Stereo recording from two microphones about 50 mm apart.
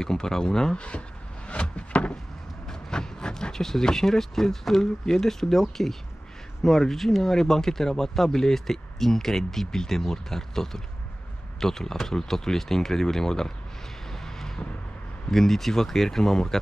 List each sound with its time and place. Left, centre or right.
0.0 s speech: centre
0.7 s speech: left
1.5 s a sound: left
2.7 s speech: centre
14.2 s vehicle: centre
15.3 s speech: centre